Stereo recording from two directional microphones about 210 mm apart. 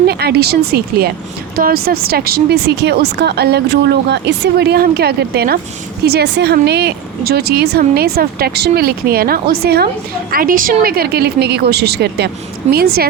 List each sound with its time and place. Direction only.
0.1 s speech: 50° right (ahead or behind)